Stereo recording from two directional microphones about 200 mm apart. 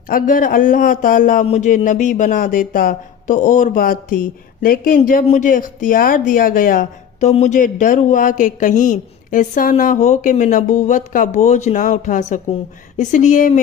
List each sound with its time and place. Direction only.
0.1 s a man's voice: 45° left (ahead or behind)